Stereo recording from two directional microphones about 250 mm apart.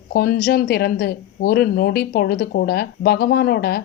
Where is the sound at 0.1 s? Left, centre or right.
Left.